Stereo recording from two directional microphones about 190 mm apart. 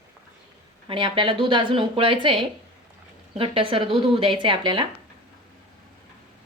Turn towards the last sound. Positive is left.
turn(degrees=-25)  # may be behind; listen again after turning